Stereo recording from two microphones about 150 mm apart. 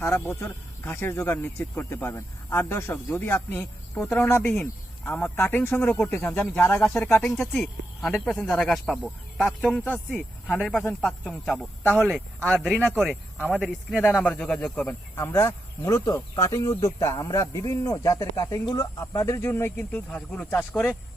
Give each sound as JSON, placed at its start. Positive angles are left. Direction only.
{"t": 0.0, "sound": "speech", "side_deg": 15}
{"t": 13.3, "sound": "speech", "side_deg": 10}